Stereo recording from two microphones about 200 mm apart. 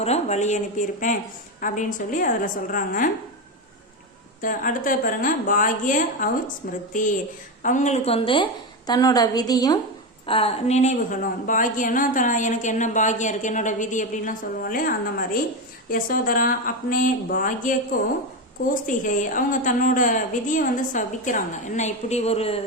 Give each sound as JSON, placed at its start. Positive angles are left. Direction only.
{"t": 0.0, "sound": "a woman's voice", "side_deg": 35}
{"t": 4.4, "sound": "a woman's voice", "side_deg": 45}